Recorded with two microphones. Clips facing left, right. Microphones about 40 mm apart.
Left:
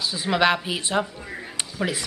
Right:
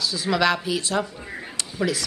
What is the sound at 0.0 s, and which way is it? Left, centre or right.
A woman's voice, left.